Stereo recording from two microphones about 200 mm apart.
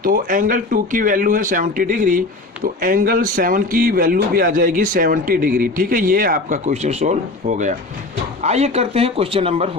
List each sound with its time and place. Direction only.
0.0 s a man's voice: 45° right (ahead or behind)